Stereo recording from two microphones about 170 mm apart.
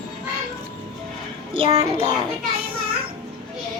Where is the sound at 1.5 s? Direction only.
35° right (ahead or behind).